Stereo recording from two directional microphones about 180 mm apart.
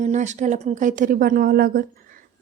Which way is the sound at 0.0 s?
40° right (ahead or behind).